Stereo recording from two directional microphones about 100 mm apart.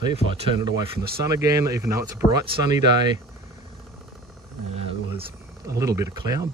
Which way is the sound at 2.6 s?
45° right (ahead or behind).